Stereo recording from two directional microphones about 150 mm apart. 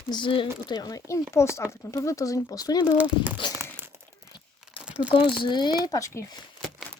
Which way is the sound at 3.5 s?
15° right (ahead or behind).